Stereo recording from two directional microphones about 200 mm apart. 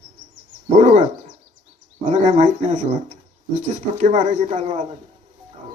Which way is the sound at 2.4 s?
35° right (ahead or behind).